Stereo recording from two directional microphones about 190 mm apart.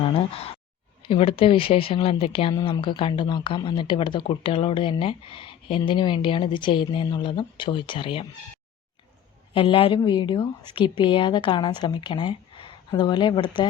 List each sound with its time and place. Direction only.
0.0 s speech: 30° left (ahead or behind)
9.6 s speech: 30° left (ahead or behind)